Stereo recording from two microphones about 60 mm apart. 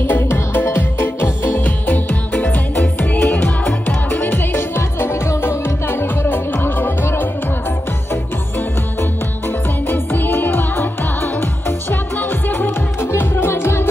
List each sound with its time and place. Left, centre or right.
0.1 s music: left
9.8 s music: left
11.9 s music: left